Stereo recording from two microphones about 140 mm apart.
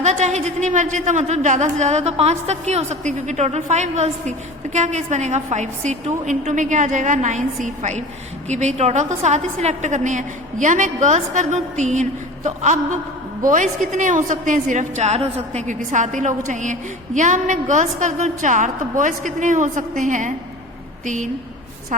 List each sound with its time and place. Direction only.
0.0 s a man's voice: 55° right (ahead or behind)